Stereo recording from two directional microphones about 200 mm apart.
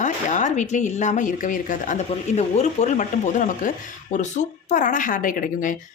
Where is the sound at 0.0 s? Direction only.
40° left (ahead or behind).